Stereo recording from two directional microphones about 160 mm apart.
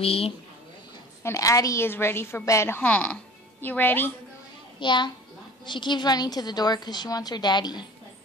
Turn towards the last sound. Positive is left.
turn(degrees=25)  # may be behind; listen again after turning